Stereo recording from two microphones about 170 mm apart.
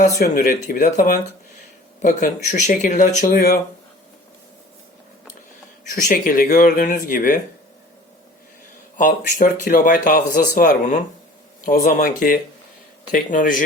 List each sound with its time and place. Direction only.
0.2 s speech: 55° left (ahead or behind)
5.8 s speech: 50° left (ahead or behind)
9.0 s speech: 50° left (ahead or behind)